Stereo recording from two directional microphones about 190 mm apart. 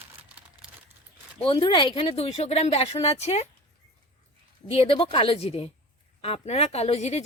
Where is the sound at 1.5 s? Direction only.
25° left (ahead or behind).